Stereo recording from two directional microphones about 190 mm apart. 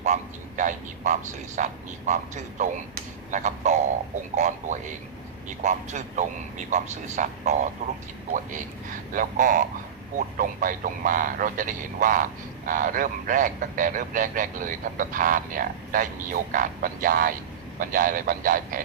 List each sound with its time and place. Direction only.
0.0 s speech: 40° right (ahead or behind)
9.1 s a man's voice: 45° right (ahead or behind)